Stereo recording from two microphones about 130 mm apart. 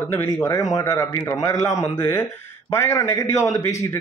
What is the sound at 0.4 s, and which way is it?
A man's voice, 25° left (ahead or behind).